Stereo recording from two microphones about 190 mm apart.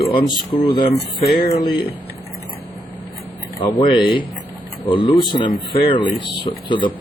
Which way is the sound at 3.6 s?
25° left (ahead or behind).